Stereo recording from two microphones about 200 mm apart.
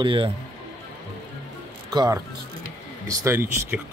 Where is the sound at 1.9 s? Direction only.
20° right (ahead or behind).